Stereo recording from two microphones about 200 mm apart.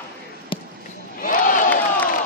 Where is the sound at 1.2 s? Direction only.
40° left (ahead or behind).